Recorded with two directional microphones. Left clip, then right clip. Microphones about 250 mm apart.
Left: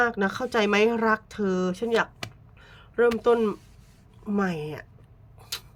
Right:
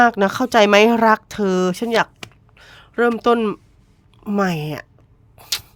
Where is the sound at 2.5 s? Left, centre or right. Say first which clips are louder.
Right 4 dB; right.